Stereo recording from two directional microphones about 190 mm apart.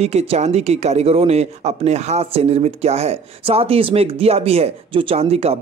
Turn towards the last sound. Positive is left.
turn(degrees=-30)  # may be behind; listen again after turning